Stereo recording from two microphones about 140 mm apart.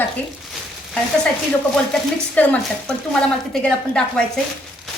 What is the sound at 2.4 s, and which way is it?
A woman's voice, 10° left (ahead or behind).